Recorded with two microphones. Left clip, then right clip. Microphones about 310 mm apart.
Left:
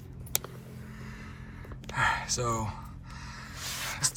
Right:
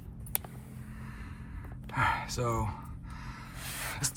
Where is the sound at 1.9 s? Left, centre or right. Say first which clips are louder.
Left 2 dB; centre.